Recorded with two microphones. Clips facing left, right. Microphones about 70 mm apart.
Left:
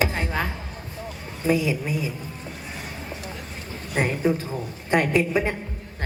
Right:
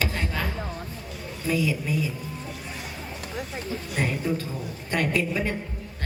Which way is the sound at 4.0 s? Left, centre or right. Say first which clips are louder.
Left 5 dB; left.